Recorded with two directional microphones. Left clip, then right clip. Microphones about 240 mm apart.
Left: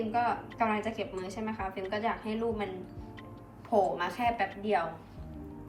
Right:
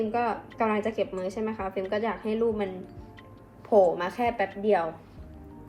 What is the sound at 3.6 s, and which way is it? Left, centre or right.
A woman's voice, right.